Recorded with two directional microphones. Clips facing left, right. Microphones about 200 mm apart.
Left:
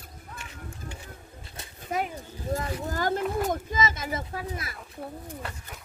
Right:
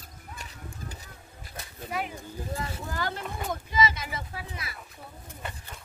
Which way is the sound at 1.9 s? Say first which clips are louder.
Left 3 dB; 45° left (ahead or behind).